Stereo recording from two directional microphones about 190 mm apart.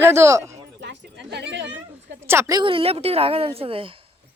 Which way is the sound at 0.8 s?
70° right (ahead or behind).